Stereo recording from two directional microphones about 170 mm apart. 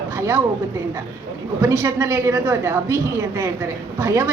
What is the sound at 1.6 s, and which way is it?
A woman's voice, 15° right (ahead or behind).